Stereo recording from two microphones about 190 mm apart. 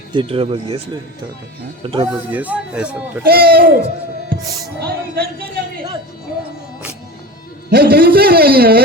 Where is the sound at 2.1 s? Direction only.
10° right (ahead or behind).